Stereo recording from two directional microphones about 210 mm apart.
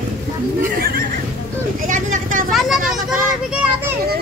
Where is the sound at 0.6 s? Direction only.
45° right (ahead or behind).